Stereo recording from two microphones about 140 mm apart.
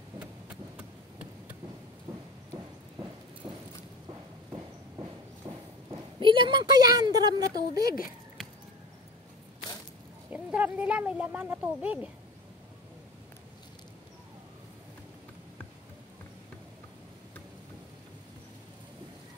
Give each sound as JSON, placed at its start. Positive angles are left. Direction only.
{"t": 0.2, "sound": "chop", "side_deg": -10}
{"t": 3.4, "sound": "a sound", "side_deg": -30}
{"t": 6.1, "sound": "a woman's voice", "side_deg": -35}
{"t": 7.8, "sound": "speech", "side_deg": 90}
{"t": 10.3, "sound": "speech", "side_deg": -10}